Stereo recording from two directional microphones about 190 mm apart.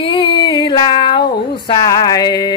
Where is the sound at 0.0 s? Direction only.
30° left (ahead or behind).